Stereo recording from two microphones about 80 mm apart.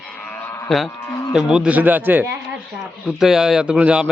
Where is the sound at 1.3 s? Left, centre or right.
Centre.